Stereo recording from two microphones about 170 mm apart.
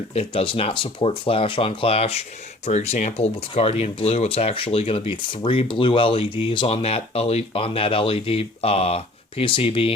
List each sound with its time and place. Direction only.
0.1 s speech: 35° left (ahead or behind)